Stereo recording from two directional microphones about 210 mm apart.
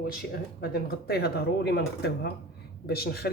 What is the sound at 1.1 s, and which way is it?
Speech, 50° left (ahead or behind).